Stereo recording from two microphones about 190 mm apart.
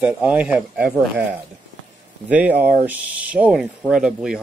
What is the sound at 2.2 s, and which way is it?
Speech, 10° right (ahead or behind).